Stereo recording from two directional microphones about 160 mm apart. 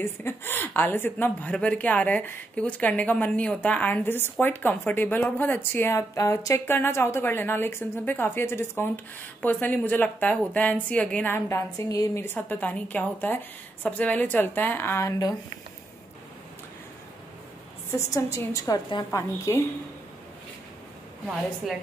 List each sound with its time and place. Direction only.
0.0 s a woman's voice: 15° left (ahead or behind)
17.9 s a woman's voice: 20° left (ahead or behind)